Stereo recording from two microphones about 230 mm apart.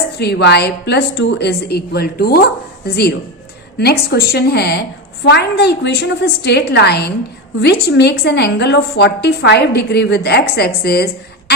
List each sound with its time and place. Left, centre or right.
0.2 s a woman's voice: left